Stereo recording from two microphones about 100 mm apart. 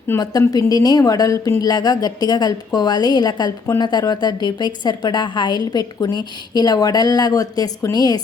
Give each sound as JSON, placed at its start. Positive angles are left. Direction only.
{"t": 0.2, "sound": "a woman's voice", "side_deg": 40}